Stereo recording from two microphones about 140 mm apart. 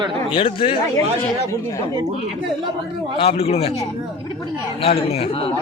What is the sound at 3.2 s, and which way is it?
Speech, 45° left (ahead or behind).